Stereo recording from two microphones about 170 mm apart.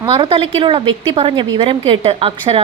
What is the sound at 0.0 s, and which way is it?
A woman's voice, 30° right (ahead or behind).